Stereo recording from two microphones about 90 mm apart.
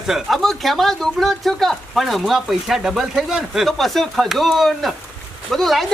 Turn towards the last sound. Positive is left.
turn(degrees=0)  # may be behind; listen again after turning